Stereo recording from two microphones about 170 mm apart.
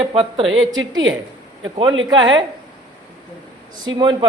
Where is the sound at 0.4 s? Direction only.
Centre (ahead or behind).